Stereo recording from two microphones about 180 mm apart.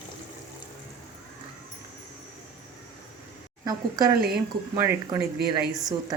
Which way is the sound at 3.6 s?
20° right (ahead or behind).